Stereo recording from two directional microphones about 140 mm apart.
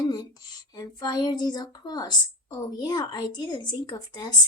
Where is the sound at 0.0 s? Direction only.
30° left (ahead or behind).